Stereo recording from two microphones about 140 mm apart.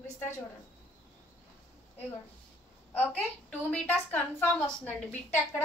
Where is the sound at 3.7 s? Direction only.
10° left (ahead or behind).